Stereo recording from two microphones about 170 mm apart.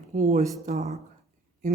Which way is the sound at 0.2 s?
50° right (ahead or behind).